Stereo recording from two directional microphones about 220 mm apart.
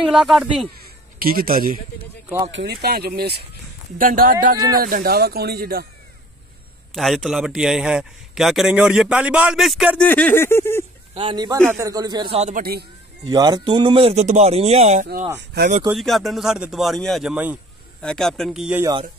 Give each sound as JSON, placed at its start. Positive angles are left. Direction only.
{"t": 0.1, "sound": "a man's voice", "side_deg": 0}
{"t": 1.2, "sound": "speech", "side_deg": -40}
{"t": 2.2, "sound": "speech", "side_deg": -15}
{"t": 2.5, "sound": "speech", "side_deg": -50}
{"t": 6.9, "sound": "a man's voice", "side_deg": 0}
{"t": 11.1, "sound": "speech", "side_deg": -20}
{"t": 13.3, "sound": "speech", "side_deg": -20}
{"t": 15.6, "sound": "speech", "side_deg": -50}
{"t": 15.9, "sound": "a man's voice", "side_deg": 0}